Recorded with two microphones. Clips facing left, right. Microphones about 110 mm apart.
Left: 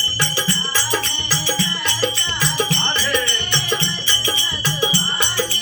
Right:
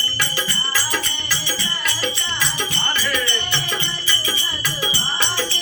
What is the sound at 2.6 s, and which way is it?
Music, 30° left (ahead or behind).